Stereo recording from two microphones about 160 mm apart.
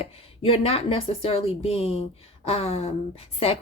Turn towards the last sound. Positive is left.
turn(degrees=40)  # may be behind; listen again after turning